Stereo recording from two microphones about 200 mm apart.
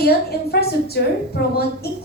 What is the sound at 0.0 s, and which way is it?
A woman's voice, 50° left (ahead or behind).